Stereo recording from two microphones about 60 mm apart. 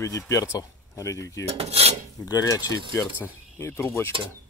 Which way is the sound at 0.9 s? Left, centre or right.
Left.